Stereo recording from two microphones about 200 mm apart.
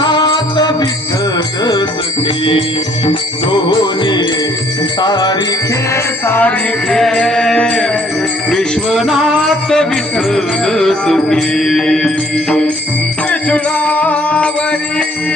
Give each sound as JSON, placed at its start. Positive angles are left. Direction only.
{"t": 0.0, "sound": "music", "side_deg": 20}
{"t": 2.2, "sound": "jingle bell", "side_deg": 25}
{"t": 5.9, "sound": "music", "side_deg": 10}